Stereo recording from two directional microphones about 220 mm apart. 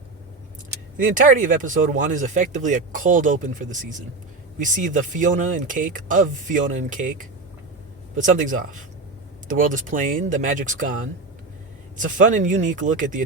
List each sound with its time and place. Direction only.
0.9 s speech: 35° right (ahead or behind)
12.0 s speech: 35° right (ahead or behind)